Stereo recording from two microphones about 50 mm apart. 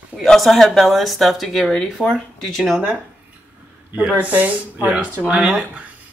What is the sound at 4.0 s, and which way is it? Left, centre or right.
A man's voice, right.